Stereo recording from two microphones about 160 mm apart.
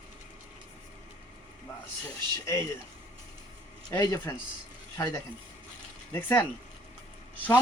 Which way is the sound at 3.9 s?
20° left (ahead or behind).